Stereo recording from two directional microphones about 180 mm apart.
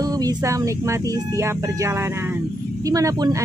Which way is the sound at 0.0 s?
20° right (ahead or behind).